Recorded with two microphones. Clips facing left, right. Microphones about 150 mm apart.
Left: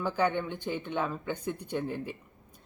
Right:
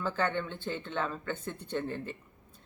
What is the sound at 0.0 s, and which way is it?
Speech, 15° left (ahead or behind).